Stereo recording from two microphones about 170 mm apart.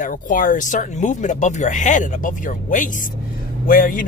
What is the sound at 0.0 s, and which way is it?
Speech, 50° left (ahead or behind).